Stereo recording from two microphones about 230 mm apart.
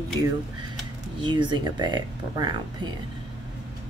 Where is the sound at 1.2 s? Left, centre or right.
Centre.